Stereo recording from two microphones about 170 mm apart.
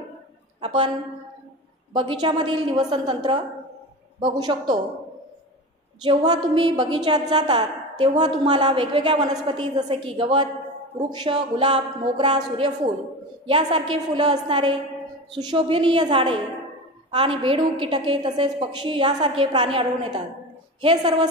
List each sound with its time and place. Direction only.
0.6 s speech: 30° right (ahead or behind)
2.0 s a woman's voice: 25° right (ahead or behind)
6.0 s a woman's voice: 25° right (ahead or behind)